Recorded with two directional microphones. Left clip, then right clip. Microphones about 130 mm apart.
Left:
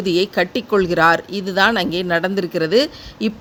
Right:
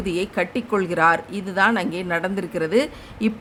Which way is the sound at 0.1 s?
35° left (ahead or behind).